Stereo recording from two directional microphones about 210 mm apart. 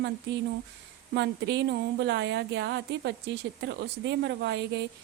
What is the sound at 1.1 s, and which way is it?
A woman's voice, 55° right (ahead or behind).